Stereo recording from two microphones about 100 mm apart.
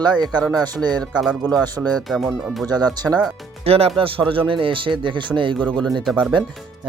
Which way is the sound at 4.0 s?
65° right (ahead or behind).